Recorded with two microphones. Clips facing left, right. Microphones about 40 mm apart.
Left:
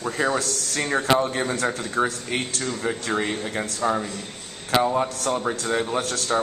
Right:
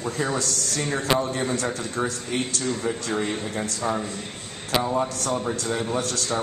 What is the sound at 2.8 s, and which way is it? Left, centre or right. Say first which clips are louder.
Speech: left 4 dB; left.